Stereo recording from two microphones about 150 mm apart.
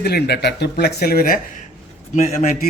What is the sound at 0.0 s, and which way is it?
Speech, 90° left.